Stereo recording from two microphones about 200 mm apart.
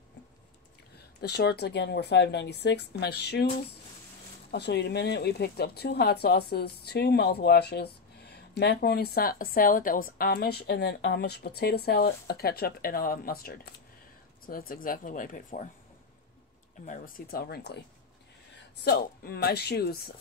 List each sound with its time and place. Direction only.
0.9 s speech: 55° left (ahead or behind)
4.5 s a woman's voice: 55° left (ahead or behind); by 15.7 s 40° left (ahead or behind)
16.8 s a woman's voice: 40° left (ahead or behind)
18.9 s a woman's voice: 50° left (ahead or behind)